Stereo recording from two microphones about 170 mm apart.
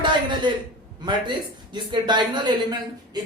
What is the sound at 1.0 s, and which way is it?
A man's voice, 25° right (ahead or behind).